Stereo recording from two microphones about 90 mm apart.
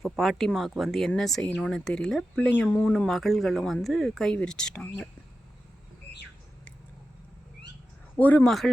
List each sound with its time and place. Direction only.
0.0 s speech: centre (ahead or behind)
8.2 s speech: 20° left (ahead or behind)
8.4 s speech: 5° left (ahead or behind)